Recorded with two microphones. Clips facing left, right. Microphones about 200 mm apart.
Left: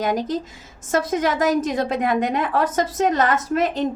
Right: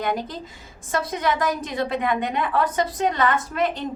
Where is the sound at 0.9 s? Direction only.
45° left (ahead or behind).